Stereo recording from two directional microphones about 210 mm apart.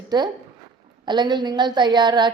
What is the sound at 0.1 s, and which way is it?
A woman's voice, 20° right (ahead or behind).